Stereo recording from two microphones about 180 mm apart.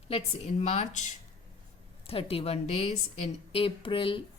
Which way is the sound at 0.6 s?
40° left (ahead or behind).